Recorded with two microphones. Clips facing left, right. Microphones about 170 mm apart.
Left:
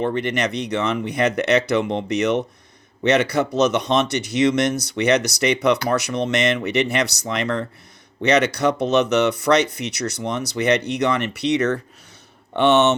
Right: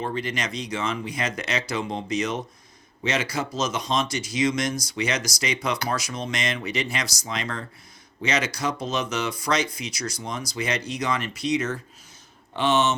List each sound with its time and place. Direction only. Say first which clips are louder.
0.0 s speech: left 7 dB; 65° left (ahead or behind)